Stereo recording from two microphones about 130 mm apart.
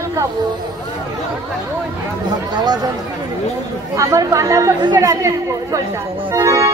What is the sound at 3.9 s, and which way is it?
A woman's voice, 25° right (ahead or behind).